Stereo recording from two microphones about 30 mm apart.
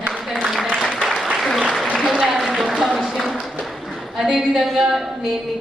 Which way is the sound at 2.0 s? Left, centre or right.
Centre.